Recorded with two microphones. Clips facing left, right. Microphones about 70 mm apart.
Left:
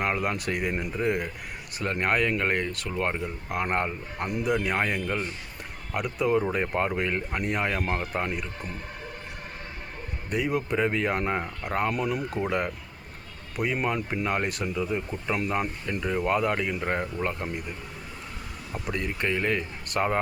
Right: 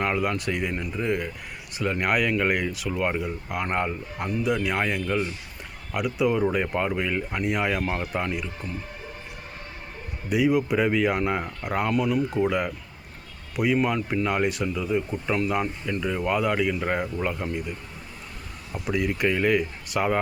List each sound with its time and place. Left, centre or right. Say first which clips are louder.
0.0 s speech: right 2 dB; centre
0.7 s speech: even; centre
1.0 s speech: even; centre
10.2 s speech: right 6 dB; centre
13.7 s speech: right 3 dB; centre
14.3 s speech: right 2 dB; centre
15.6 s speech: right 2 dB; centre
18.7 s speech: right 5 dB; centre